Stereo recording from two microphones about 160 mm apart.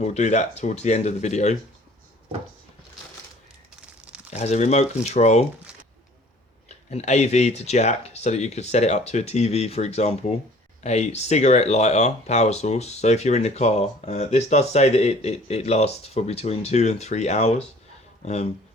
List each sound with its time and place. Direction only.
0.0 s speech: 45° left (ahead or behind)
4.3 s speech: 45° left (ahead or behind)
6.7 s speech: 45° left (ahead or behind)